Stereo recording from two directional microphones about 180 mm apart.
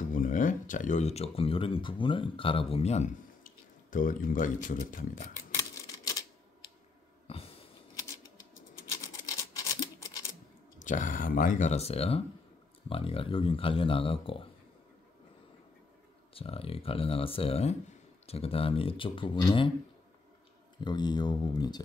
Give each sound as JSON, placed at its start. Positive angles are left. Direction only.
{"t": 0.1, "sound": "speech", "side_deg": 50}
{"t": 5.6, "sound": "a sound", "side_deg": 20}
{"t": 9.0, "sound": "a sound", "side_deg": 20}
{"t": 10.8, "sound": "speech", "side_deg": 45}
{"t": 16.3, "sound": "speech", "side_deg": 30}
{"t": 20.8, "sound": "speech", "side_deg": 25}